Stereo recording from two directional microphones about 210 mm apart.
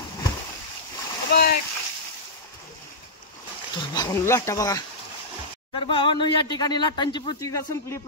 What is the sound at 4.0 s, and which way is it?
Speech, 15° left (ahead or behind).